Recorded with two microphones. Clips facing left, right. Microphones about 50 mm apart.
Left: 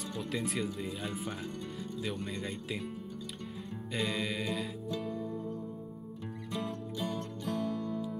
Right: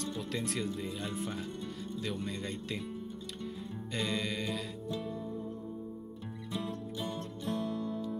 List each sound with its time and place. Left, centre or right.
0.2 s speech: centre
3.7 s music: centre
7.4 s music: left